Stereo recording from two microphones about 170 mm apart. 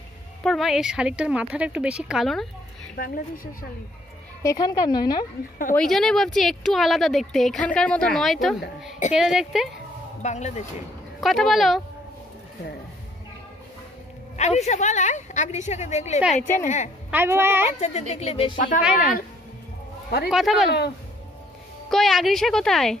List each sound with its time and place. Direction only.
0.4 s a woman's voice: centre (ahead or behind)
4.4 s speech: 20° left (ahead or behind)
5.8 s a woman's voice: centre (ahead or behind)
10.2 s a woman's voice: 45° left (ahead or behind)
11.1 s a woman's voice: centre (ahead or behind)
14.3 s a woman's voice: 40° left (ahead or behind)
17.1 s a child's voice: 15° right (ahead or behind)
17.7 s speech: 40° left (ahead or behind)
18.8 s a woman's voice: 5° right (ahead or behind)
20.2 s a woman's voice: centre (ahead or behind)
21.8 s a woman's voice: centre (ahead or behind)